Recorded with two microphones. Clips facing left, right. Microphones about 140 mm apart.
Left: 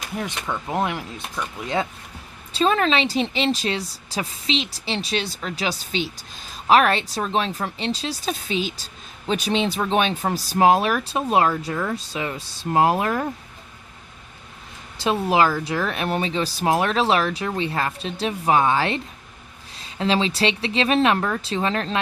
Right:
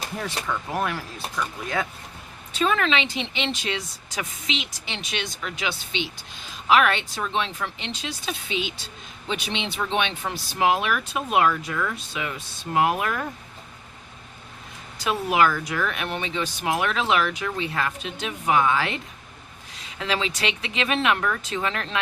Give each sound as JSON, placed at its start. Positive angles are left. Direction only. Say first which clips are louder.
{"t": 0.2, "sound": "speech", "louder": "left 2 dB", "side_deg": 20}
{"t": 2.5, "sound": "speech", "louder": "left 3 dB", "side_deg": 30}
{"t": 14.9, "sound": "speech", "louder": "left 3 dB", "side_deg": 30}